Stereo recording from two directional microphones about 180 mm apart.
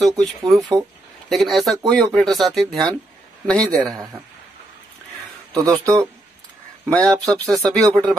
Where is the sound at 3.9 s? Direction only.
15° right (ahead or behind).